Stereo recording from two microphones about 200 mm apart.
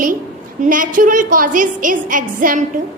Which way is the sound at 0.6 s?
40° right (ahead or behind).